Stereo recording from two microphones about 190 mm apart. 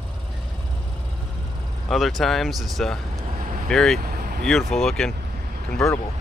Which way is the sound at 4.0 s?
50° right (ahead or behind).